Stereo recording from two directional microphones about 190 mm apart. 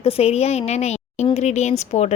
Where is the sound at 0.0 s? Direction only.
35° left (ahead or behind).